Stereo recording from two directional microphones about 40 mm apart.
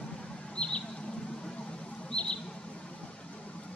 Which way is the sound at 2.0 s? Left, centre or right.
Left.